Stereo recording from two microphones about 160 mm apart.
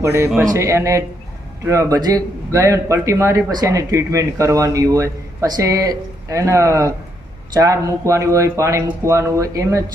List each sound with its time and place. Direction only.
0.0 s speech: 15° right (ahead or behind)